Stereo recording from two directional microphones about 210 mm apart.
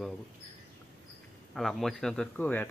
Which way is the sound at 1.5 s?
Centre (ahead or behind).